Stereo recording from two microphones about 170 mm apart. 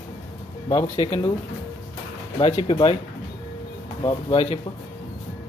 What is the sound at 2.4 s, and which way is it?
Speech, 30° left (ahead or behind).